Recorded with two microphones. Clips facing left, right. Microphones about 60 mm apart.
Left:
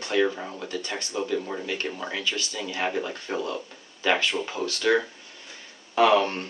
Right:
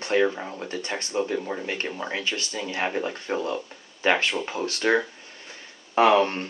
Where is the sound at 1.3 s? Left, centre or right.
Centre.